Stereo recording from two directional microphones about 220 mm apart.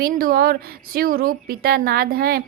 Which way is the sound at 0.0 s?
40° right (ahead or behind).